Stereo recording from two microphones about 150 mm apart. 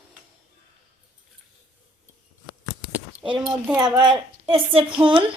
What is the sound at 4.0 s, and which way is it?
A woman's voice, 35° right (ahead or behind).